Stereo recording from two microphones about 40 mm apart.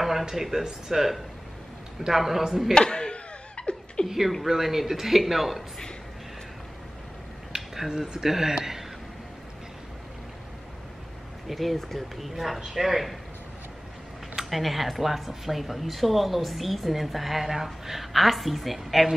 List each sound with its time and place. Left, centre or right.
0.0 s speech: centre
2.7 s laughter: left
4.5 s speech: centre
7.5 s a sound: centre
8.1 s speech: centre
11.4 s speech: centre
14.3 s speech: centre